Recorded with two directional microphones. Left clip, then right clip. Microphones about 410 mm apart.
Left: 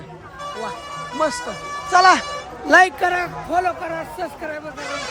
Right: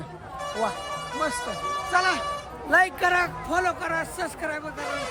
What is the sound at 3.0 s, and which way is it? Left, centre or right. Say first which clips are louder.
A man's voice: left 2 dB; centre.